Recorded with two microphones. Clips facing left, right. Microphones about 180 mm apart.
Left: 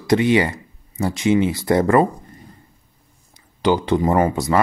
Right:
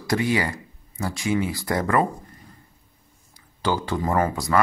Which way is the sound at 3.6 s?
20° left (ahead or behind).